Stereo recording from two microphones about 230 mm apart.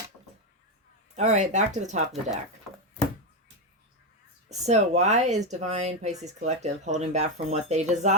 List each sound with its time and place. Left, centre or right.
1.1 s speech: right
4.4 s speech: right